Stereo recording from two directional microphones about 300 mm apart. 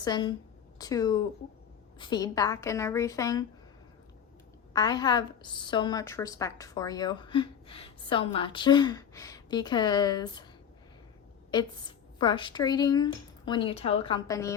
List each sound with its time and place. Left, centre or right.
0.0 s a woman's voice: centre
4.7 s a woman's voice: centre
11.5 s a woman's voice: centre